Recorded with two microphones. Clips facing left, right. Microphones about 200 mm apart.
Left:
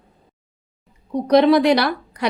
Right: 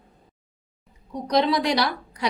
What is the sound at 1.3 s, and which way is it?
A woman's voice, 60° left (ahead or behind).